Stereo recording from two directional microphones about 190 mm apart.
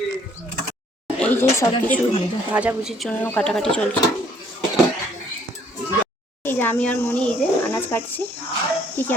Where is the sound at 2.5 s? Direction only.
5° right (ahead or behind).